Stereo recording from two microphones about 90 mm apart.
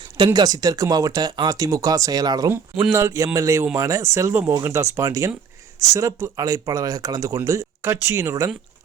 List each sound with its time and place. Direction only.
0.3 s speech: 45° right (ahead or behind)
2.9 s speech: 35° right (ahead or behind)